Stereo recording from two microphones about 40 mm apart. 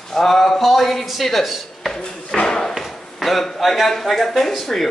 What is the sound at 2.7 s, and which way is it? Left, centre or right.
Chop, centre.